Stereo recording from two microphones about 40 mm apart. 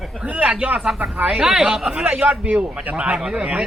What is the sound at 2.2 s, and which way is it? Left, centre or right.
Speech, right.